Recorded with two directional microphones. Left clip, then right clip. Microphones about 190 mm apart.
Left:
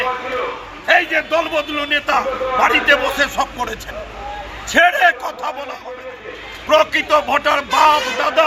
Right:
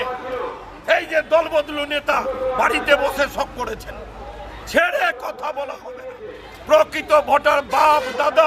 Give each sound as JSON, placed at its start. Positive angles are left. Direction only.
{"t": 0.9, "sound": "a man's voice", "side_deg": -25}
{"t": 6.7, "sound": "a man's voice", "side_deg": -30}